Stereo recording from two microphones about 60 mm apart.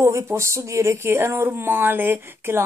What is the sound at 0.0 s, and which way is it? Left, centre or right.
Speech, right.